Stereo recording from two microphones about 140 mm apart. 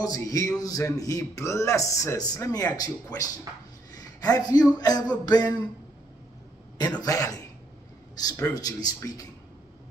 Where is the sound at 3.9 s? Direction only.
25° left (ahead or behind).